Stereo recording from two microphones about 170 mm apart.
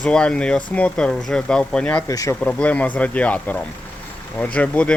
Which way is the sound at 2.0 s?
20° left (ahead or behind).